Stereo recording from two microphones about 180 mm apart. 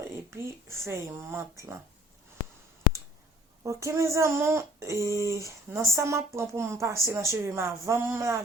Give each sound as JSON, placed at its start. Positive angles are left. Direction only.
{"t": 0.3, "sound": "a woman's voice", "side_deg": -15}
{"t": 3.6, "sound": "a woman's voice", "side_deg": -15}